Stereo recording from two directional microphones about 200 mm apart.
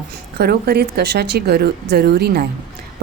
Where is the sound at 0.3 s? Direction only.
50° right (ahead or behind).